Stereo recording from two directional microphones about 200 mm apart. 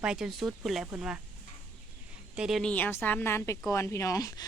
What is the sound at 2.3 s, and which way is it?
A woman's voice, 5° right (ahead or behind).